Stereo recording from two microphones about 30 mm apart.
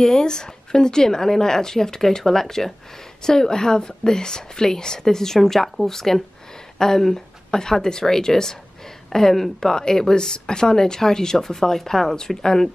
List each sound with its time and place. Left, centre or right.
0.0 s a woman's voice: left